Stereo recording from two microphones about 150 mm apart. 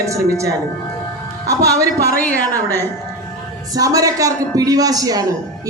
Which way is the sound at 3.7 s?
20° right (ahead or behind).